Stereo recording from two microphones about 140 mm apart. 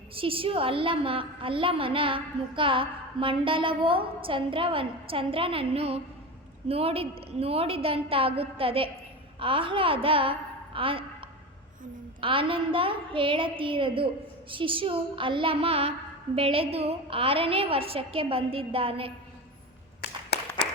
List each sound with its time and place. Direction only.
0.2 s a woman's voice: 40° right (ahead or behind)
12.2 s a woman's voice: 40° right (ahead or behind)